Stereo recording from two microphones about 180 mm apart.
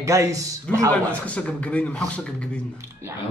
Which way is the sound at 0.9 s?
5° left (ahead or behind).